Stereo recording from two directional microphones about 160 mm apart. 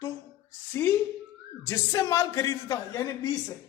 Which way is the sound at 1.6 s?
20° left (ahead or behind).